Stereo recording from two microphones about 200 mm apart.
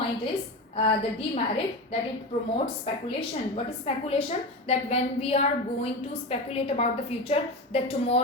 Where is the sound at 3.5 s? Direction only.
30° left (ahead or behind).